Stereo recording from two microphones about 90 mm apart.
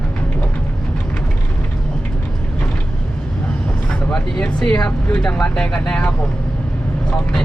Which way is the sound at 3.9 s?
10° left (ahead or behind).